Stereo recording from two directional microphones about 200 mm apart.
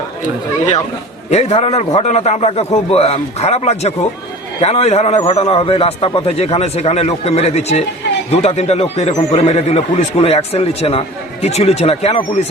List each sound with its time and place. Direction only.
1.3 s a man's voice: 35° left (ahead or behind)